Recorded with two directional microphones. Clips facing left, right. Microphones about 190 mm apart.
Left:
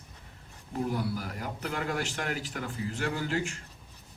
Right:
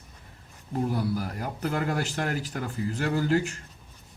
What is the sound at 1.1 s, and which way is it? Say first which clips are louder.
Speech: right 4 dB; 40° right (ahead or behind).